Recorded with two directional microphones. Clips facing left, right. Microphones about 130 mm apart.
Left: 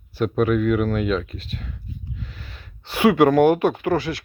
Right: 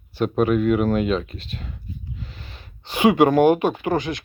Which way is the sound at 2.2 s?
25° right (ahead or behind).